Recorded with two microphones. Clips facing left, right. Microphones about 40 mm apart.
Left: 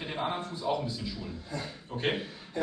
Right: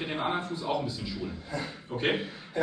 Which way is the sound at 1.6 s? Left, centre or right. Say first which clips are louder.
Right 4 dB; centre.